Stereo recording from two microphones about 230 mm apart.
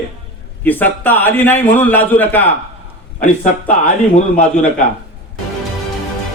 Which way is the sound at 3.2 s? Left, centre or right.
Left.